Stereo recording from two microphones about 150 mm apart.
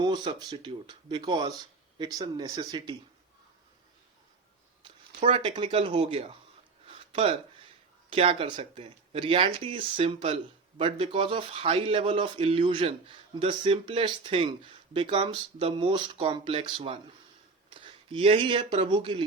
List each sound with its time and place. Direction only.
0.0 s speech: 30° right (ahead or behind)
5.3 s speech: 35° right (ahead or behind)
6.9 s a sound: 35° right (ahead or behind)
8.1 s speech: 40° right (ahead or behind)
17.7 s a sound: 35° right (ahead or behind)
18.9 s speech: 35° right (ahead or behind)